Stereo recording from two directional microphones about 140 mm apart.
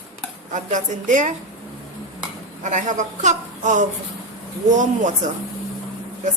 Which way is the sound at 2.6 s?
60° right (ahead or behind).